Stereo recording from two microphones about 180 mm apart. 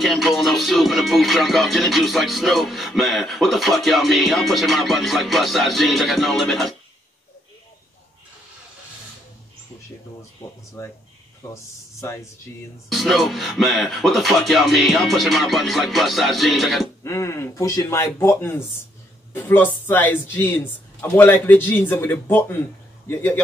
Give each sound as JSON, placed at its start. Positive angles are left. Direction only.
{"t": 0.0, "sound": "music", "side_deg": 0}
{"t": 10.8, "sound": "speech", "side_deg": 15}
{"t": 12.9, "sound": "music", "side_deg": 0}
{"t": 17.0, "sound": "speech", "side_deg": 15}